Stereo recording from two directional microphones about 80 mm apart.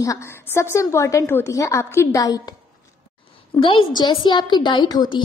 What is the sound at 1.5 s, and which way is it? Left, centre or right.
Speech, left.